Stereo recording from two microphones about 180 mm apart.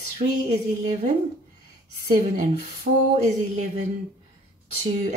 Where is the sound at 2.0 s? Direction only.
50° right (ahead or behind).